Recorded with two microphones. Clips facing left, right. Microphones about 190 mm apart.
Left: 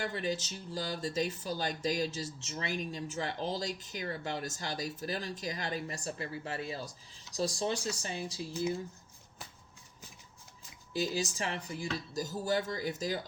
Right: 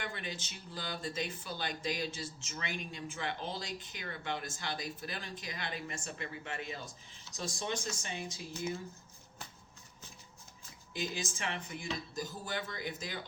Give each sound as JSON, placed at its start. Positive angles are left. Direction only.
{"t": 0.0, "sound": "speech", "side_deg": 40}
{"t": 10.9, "sound": "speech", "side_deg": 35}